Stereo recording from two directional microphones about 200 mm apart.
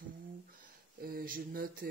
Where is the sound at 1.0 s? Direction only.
45° right (ahead or behind).